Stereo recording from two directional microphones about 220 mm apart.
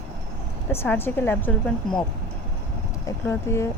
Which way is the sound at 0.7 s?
10° left (ahead or behind).